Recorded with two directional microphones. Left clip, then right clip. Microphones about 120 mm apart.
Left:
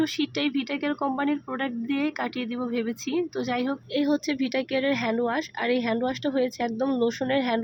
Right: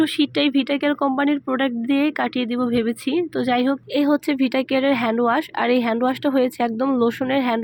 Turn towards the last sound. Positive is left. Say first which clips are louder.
# right 4 dB
turn(degrees=-35)  # may be behind; listen again after turning